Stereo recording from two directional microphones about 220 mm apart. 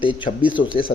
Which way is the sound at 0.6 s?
60° left (ahead or behind).